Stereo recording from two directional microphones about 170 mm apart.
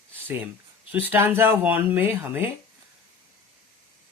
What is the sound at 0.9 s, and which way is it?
Speech, 10° right (ahead or behind).